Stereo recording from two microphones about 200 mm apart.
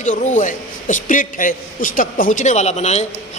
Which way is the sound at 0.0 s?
40° left (ahead or behind).